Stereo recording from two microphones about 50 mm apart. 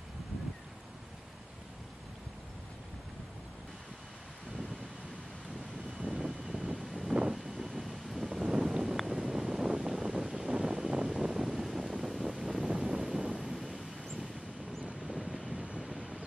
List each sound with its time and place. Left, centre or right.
5.9 s wind noise: centre
9.1 s vehicle: centre
9.8 s a sound: centre
12.6 s wind noise: centre
14.9 s vehicle: right